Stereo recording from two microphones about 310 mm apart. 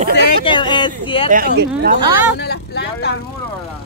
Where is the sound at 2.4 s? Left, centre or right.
Left.